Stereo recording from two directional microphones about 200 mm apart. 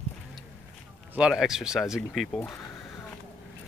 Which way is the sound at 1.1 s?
5° right (ahead or behind).